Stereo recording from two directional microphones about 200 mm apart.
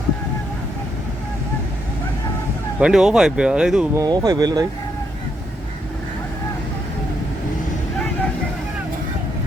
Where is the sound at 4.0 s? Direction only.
20° right (ahead or behind).